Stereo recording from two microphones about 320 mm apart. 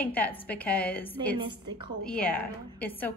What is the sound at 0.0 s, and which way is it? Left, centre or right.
A woman's voice, centre.